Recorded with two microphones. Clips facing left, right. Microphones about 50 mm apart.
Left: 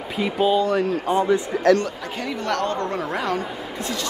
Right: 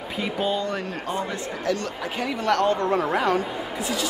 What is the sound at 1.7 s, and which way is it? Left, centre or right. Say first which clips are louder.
Speech: left 10 dB; left.